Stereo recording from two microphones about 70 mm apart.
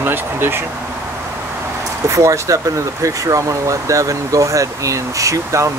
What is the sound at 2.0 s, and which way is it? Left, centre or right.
Speech, right.